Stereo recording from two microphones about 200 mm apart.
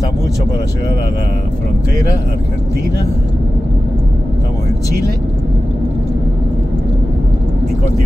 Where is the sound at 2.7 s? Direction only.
50° right (ahead or behind).